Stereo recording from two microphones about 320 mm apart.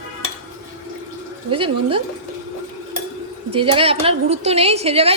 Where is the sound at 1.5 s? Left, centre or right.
Centre.